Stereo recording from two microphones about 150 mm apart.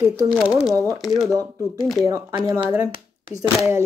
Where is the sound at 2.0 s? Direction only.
25° right (ahead or behind).